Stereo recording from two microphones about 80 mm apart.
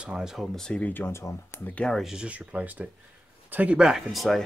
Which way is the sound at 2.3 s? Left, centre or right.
Centre.